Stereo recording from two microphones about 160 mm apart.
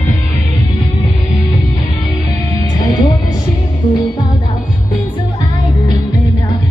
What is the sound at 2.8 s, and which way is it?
Music, 25° left (ahead or behind).